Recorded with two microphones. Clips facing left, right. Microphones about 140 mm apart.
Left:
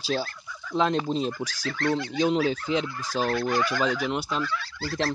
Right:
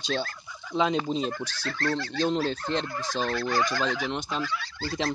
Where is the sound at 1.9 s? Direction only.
20° left (ahead or behind).